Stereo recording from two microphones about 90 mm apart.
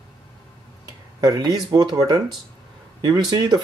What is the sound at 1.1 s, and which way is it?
Speech, 45° right (ahead or behind).